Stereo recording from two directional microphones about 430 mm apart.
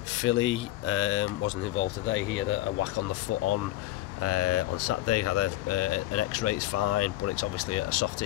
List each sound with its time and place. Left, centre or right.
0.1 s speech: left